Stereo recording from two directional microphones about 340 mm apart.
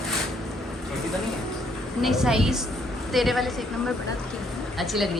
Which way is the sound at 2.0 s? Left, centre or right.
Centre.